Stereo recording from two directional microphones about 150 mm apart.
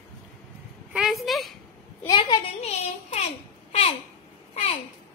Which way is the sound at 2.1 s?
30° left (ahead or behind).